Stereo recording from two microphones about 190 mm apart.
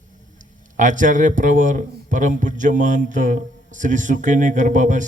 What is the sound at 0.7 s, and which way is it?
A man's voice, 40° right (ahead or behind).